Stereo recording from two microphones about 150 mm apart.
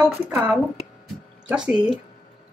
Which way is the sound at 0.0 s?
10° right (ahead or behind).